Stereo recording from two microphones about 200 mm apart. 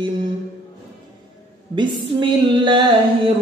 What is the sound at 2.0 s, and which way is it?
Music, 25° right (ahead or behind).